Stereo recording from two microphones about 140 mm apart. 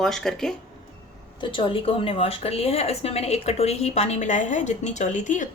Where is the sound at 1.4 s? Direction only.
40° left (ahead or behind); by 5.5 s 65° left (ahead or behind).